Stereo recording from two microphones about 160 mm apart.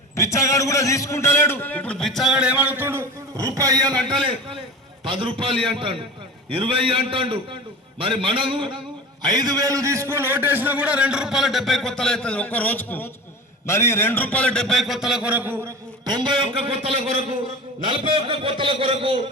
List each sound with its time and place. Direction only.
0.2 s a man's voice: 20° left (ahead or behind); by 3.9 s 20° right (ahead or behind)
5.0 s a man's voice: 35° right (ahead or behind); by 15.7 s 10° right (ahead or behind)
16.0 s a man's voice: 30° right (ahead or behind)